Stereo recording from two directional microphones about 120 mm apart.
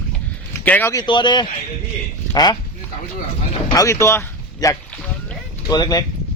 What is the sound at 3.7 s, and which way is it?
Speech, 25° left (ahead or behind).